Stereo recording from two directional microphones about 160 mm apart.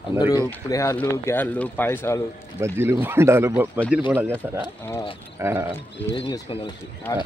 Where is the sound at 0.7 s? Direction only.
20° left (ahead or behind).